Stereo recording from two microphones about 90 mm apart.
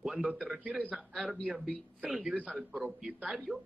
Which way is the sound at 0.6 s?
15° right (ahead or behind).